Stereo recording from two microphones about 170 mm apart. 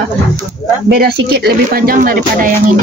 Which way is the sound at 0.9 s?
70° right (ahead or behind).